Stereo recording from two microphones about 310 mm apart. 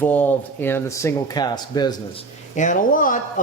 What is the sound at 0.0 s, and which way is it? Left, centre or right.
Speech, centre.